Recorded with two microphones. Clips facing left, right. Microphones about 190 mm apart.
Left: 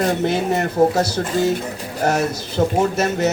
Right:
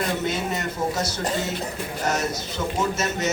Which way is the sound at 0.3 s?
60° left (ahead or behind).